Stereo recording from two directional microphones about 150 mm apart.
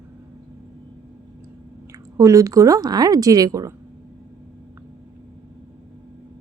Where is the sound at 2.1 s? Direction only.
20° right (ahead or behind).